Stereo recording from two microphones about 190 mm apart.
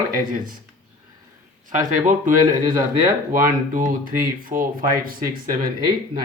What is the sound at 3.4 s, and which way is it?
Speech, 45° right (ahead or behind).